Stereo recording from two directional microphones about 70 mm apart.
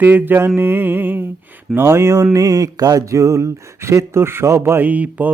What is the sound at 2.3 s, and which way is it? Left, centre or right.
Speech, right.